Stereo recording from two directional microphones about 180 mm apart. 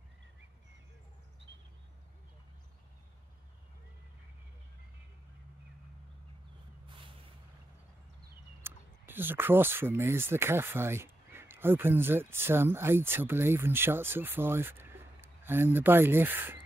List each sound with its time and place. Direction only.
8.6 s speech: 10° right (ahead or behind)